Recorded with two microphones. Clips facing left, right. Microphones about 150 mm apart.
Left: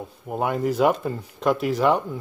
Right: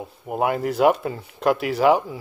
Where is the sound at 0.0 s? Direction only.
5° right (ahead or behind).